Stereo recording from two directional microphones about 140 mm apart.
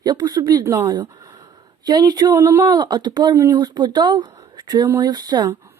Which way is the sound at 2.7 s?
30° right (ahead or behind).